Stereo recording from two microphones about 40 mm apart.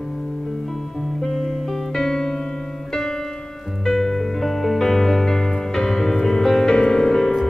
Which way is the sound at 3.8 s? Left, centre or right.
Centre.